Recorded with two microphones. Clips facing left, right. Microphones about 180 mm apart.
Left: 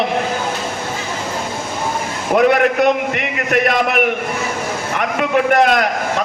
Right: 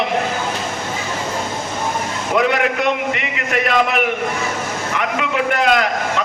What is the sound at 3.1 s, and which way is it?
Speech, 55° left (ahead or behind).